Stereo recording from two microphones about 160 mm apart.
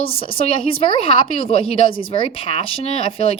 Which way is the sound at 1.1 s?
30° left (ahead or behind).